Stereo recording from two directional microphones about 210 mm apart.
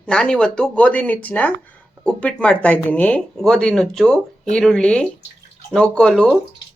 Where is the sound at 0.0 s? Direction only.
5° left (ahead or behind).